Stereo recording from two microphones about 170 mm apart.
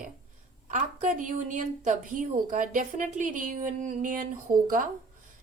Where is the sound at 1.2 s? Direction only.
50° right (ahead or behind).